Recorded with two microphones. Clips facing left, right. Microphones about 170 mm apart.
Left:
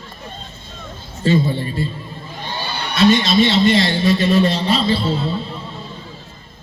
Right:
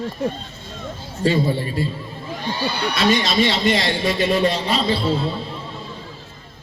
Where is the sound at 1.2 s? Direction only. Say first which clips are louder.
Left 2 dB; 25° left (ahead or behind).